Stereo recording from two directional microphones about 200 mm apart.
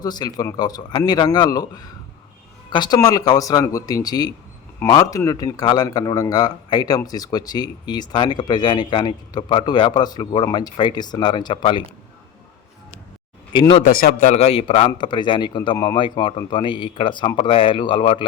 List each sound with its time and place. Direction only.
0.0 s speech: 20° left (ahead or behind)
13.5 s speech: 25° left (ahead or behind)
13.8 s a man's voice: 45° left (ahead or behind); by 18.3 s 25° left (ahead or behind)